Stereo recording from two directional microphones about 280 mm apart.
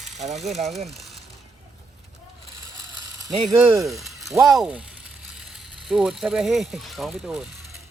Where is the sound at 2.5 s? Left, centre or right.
Right.